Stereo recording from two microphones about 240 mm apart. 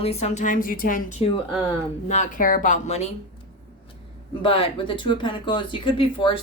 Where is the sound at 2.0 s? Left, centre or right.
Left.